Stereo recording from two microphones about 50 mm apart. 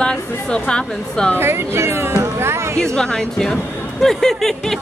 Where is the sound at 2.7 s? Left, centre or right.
Centre.